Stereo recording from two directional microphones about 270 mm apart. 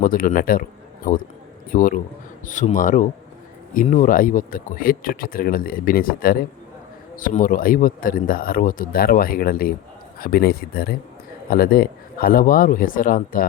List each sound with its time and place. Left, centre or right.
0.0 s speech: left
1.7 s speech: left